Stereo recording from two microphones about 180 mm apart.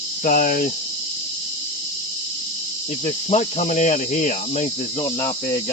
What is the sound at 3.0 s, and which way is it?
Cricket, 40° left (ahead or behind).